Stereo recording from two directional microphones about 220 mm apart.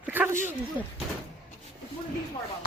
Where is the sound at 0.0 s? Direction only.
10° right (ahead or behind).